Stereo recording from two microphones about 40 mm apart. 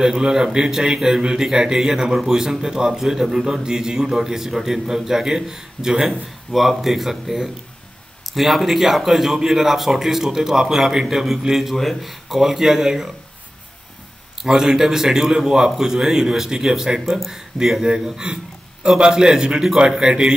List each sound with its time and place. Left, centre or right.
0.0 s a man's voice: centre
6.5 s a man's voice: centre
11.7 s a man's voice: centre
14.4 s a man's voice: centre
17.0 s speech: centre
17.8 s a man's voice: centre